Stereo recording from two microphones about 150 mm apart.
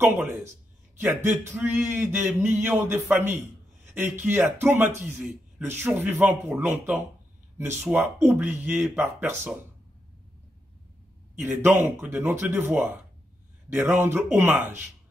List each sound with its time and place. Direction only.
0.0 s a man's voice: 15° right (ahead or behind)
11.3 s a man's voice: 15° right (ahead or behind)